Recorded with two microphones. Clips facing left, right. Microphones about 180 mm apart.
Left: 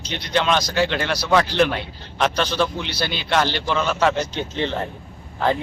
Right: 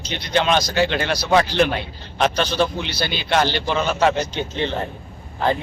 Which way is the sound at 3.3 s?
20° right (ahead or behind).